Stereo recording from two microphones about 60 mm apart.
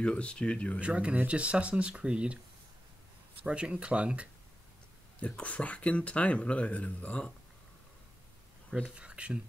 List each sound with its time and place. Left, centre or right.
0.0 s speech: centre
0.7 s speech: right
3.4 s speech: centre
5.2 s speech: left
8.9 s speech: centre